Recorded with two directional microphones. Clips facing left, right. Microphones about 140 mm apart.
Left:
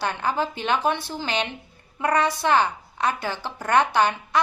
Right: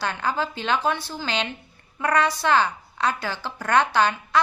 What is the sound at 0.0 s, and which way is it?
A woman's voice, 20° left (ahead or behind).